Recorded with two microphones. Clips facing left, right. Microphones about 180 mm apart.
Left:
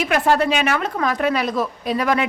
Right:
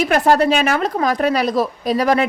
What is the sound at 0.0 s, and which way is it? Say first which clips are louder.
A woman's voice: right 3 dB; 40° right (ahead or behind).